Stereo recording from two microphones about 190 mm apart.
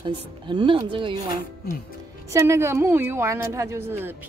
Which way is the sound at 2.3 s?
15° right (ahead or behind).